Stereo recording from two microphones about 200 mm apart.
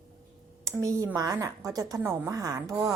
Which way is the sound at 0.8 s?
15° right (ahead or behind).